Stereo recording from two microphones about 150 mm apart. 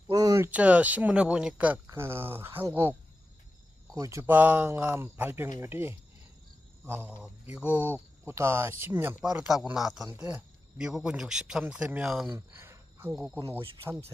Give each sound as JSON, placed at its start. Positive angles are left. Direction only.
{"t": 0.1, "sound": "speech", "side_deg": -25}
{"t": 3.9, "sound": "speech", "side_deg": -20}
{"t": 9.2, "sound": "speech", "side_deg": -5}
{"t": 12.3, "sound": "cricket", "side_deg": -15}
{"t": 13.1, "sound": "speech", "side_deg": -5}